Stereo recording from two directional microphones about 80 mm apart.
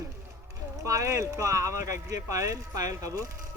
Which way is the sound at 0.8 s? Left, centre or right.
Right.